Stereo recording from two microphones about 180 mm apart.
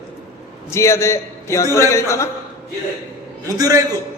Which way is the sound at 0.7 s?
15° left (ahead or behind).